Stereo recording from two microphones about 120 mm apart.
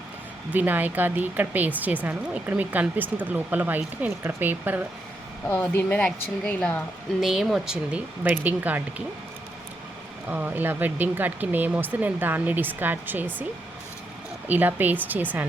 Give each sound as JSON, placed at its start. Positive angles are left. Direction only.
{"t": 0.5, "sound": "speech", "side_deg": -15}
{"t": 5.5, "sound": "a woman's voice", "side_deg": 10}
{"t": 7.2, "sound": "speech", "side_deg": 0}
{"t": 10.2, "sound": "speech", "side_deg": -15}
{"t": 14.4, "sound": "speech", "side_deg": -15}